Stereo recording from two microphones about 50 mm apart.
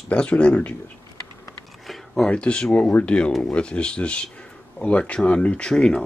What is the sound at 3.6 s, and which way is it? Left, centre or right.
Speech, left.